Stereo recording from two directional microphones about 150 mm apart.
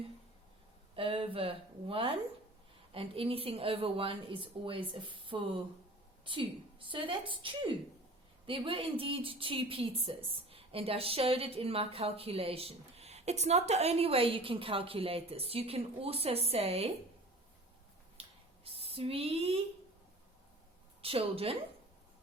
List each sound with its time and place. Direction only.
0.9 s a woman's voice: 35° right (ahead or behind)
18.6 s a sound: 40° right (ahead or behind)
21.0 s a woman's voice: 40° right (ahead or behind)